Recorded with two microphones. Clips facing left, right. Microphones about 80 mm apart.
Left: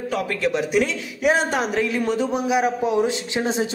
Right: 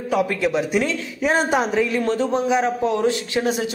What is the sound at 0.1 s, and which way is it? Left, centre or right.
Speech, centre.